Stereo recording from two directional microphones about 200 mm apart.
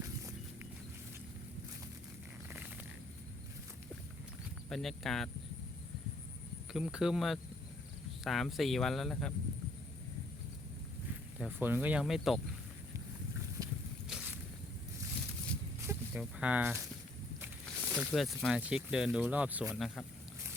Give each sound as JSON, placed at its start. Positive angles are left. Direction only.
{"t": 2.5, "sound": "a sound", "side_deg": -10}
{"t": 4.7, "sound": "speech", "side_deg": 0}
{"t": 6.7, "sound": "speech", "side_deg": 0}
{"t": 11.3, "sound": "speech", "side_deg": -10}
{"t": 13.6, "sound": "a sound", "side_deg": -20}
{"t": 16.1, "sound": "speech", "side_deg": -5}